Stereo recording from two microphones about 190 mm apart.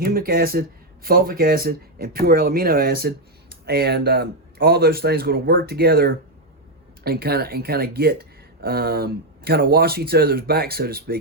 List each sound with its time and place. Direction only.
0.0 s speech: 50° right (ahead or behind)